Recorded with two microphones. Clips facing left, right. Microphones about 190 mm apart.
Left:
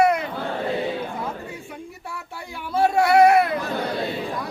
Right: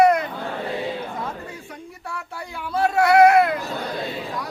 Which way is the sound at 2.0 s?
25° left (ahead or behind).